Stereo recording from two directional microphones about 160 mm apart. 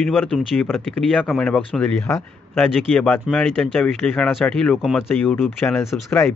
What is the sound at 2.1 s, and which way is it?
Speech, 20° left (ahead or behind).